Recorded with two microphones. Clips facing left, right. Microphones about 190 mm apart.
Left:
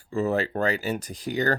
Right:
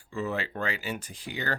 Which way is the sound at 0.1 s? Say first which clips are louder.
Left 7 dB; 40° left (ahead or behind).